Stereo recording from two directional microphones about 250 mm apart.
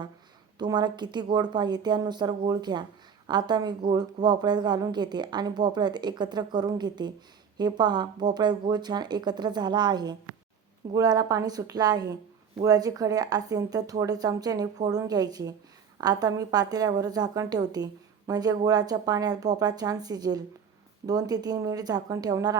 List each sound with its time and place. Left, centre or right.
0.6 s a woman's voice: centre